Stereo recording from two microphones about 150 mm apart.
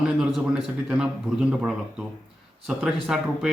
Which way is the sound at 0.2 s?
Centre (ahead or behind).